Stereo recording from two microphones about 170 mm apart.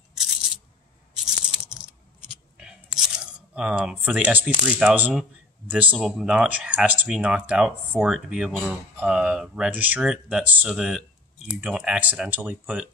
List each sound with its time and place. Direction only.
0.1 s scissors: 5° right (ahead or behind)
1.2 s a sound: 5° right (ahead or behind)
3.5 s speech: 5° right (ahead or behind)